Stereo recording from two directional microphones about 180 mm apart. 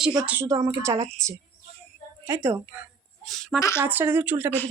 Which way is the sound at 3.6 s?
15° left (ahead or behind).